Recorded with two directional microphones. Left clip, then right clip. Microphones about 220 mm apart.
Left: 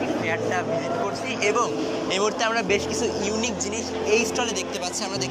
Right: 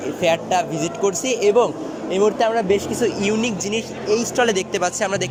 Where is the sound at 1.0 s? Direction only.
55° right (ahead or behind).